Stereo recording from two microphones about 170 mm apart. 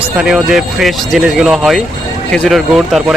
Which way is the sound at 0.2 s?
5° right (ahead or behind).